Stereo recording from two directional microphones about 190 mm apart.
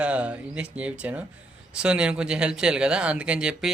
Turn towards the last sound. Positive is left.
turn(degrees=-5)  # may be behind; listen again after turning